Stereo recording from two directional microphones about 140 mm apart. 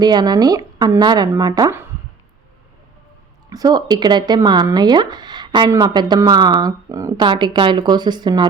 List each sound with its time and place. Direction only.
0.0 s speech: 30° right (ahead or behind)
3.5 s speech: 30° right (ahead or behind)